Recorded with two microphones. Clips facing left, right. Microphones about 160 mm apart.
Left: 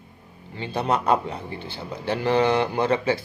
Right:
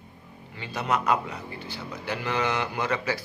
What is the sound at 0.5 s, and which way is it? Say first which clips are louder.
A man's voice: left 4 dB; 30° left (ahead or behind).